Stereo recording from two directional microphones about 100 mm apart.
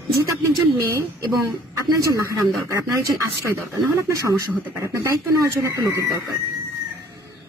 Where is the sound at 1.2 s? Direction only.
35° right (ahead or behind).